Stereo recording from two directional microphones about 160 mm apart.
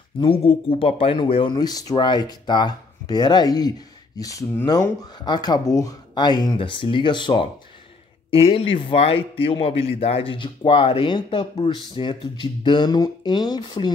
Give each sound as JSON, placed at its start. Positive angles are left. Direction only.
{"t": 0.2, "sound": "a man's voice", "side_deg": 35}